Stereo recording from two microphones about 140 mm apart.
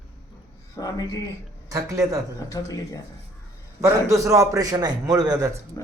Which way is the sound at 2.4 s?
20° left (ahead or behind).